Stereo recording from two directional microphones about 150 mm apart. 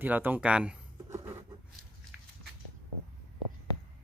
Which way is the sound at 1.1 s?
20° right (ahead or behind).